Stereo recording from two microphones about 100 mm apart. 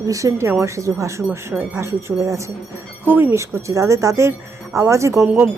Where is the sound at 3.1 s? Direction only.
20° right (ahead or behind).